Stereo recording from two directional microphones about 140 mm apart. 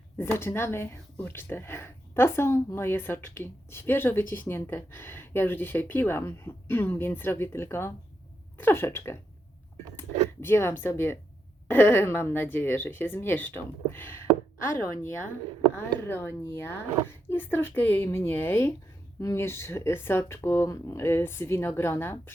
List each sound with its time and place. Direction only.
0.2 s speech: 15° left (ahead or behind)
10.4 s speech: 15° left (ahead or behind)
15.7 s speech: 15° left (ahead or behind)